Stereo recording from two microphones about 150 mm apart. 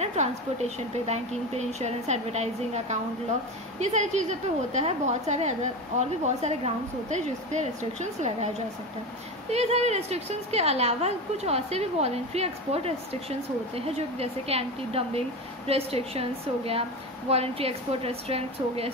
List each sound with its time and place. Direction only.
0.0 s a woman's voice: 45° right (ahead or behind)
9.5 s a woman's voice: 45° right (ahead or behind)